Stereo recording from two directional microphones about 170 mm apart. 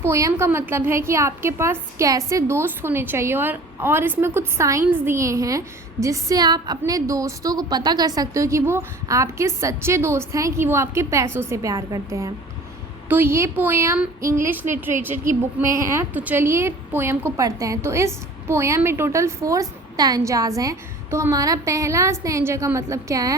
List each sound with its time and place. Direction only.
0.0 s a woman's voice: 15° right (ahead or behind)